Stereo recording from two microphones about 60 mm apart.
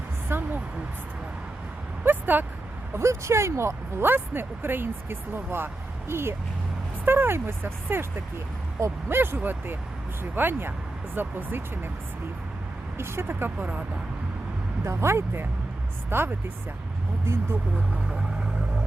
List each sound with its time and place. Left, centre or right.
0.3 s a sound: right
2.0 s speech: right
2.9 s speech: right
9.0 s speech: right
13.0 s speech: right
14.8 s speech: right
17.9 s vehicle: centre